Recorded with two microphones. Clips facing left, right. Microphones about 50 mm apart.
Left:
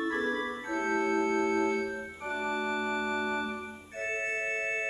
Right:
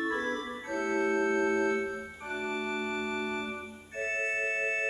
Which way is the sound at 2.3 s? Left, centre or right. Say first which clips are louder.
Left 2 dB; centre.